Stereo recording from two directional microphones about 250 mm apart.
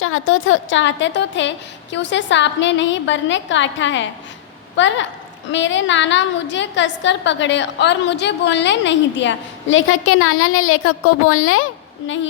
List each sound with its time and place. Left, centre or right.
0.0 s a woman's voice: left